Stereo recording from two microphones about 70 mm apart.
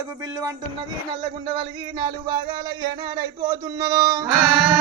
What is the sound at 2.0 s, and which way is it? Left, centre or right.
Music, right.